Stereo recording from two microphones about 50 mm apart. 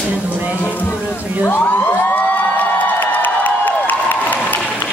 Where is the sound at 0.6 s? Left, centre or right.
Left.